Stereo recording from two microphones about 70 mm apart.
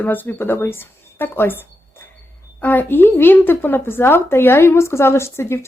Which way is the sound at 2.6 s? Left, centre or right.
Left.